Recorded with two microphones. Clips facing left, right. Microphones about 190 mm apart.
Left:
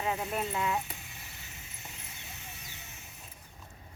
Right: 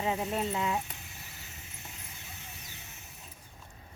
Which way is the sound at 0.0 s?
20° right (ahead or behind).